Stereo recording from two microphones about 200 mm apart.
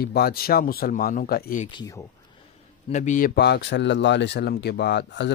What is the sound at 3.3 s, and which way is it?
Speech, 55° left (ahead or behind).